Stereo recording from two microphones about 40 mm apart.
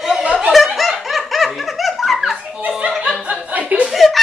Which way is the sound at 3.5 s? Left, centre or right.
Right.